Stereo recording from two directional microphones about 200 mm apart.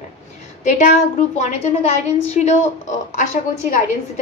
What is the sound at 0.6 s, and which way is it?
A woman's voice, 35° left (ahead or behind).